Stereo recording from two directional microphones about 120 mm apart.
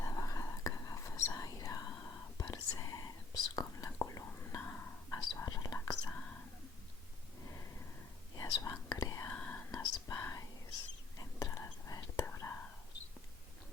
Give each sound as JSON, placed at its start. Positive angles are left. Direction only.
{"t": 0.0, "sound": "whispering", "side_deg": 30}
{"t": 5.1, "sound": "whispering", "side_deg": 35}
{"t": 7.4, "sound": "a sound", "side_deg": 25}
{"t": 8.4, "sound": "whispering", "side_deg": 30}
{"t": 9.3, "sound": "whispering", "side_deg": 15}
{"t": 9.7, "sound": "whispering", "side_deg": 30}